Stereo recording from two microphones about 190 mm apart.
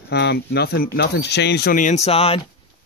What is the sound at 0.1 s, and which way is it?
Speech, 60° left (ahead or behind).